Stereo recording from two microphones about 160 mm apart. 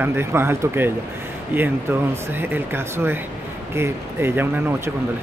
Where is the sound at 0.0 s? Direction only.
15° right (ahead or behind).